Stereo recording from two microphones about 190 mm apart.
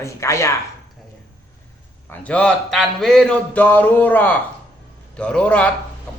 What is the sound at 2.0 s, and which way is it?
A man's voice, 10° left (ahead or behind).